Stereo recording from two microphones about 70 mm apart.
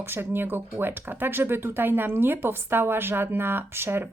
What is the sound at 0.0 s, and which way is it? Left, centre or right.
A woman's voice, right.